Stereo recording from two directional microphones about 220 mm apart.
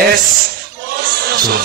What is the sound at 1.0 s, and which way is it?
Crowd, 45° right (ahead or behind).